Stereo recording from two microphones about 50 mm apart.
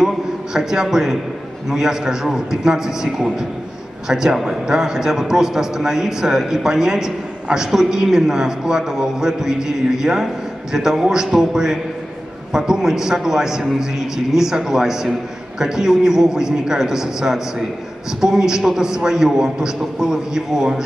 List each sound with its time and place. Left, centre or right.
0.0 s a man's voice: centre